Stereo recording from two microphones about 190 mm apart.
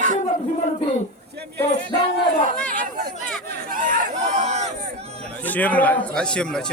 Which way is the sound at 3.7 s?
45° right (ahead or behind).